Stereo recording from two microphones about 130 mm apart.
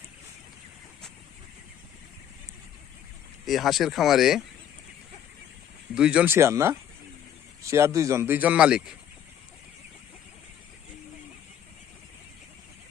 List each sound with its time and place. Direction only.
3.4 s speech: centre (ahead or behind)
5.9 s speech: 5° right (ahead or behind)
6.3 s speech: 20° right (ahead or behind)